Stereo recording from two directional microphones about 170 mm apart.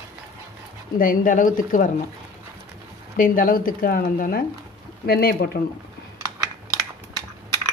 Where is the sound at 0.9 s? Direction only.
50° left (ahead or behind).